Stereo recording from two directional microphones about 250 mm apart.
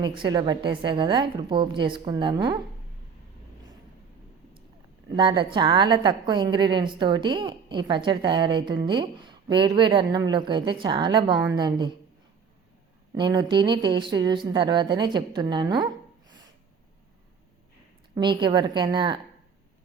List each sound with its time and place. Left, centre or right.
0.0 s a woman's voice: centre
5.1 s a woman's voice: centre
13.1 s speech: centre
18.1 s a woman's voice: centre